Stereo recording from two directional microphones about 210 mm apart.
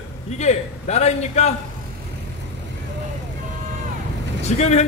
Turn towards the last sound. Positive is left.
turn(degrees=30)  # may be behind; listen again after turning